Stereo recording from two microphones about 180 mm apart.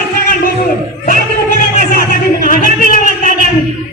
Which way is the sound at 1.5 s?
50° left (ahead or behind).